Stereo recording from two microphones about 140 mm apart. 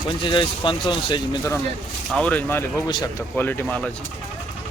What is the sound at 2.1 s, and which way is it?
Speech, 10° left (ahead or behind).